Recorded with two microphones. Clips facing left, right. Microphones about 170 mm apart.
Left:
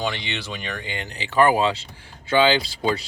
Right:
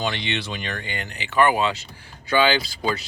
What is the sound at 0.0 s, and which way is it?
Speech, 5° left (ahead or behind).